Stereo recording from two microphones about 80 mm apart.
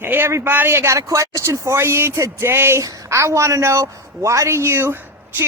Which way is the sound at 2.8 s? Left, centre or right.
Right.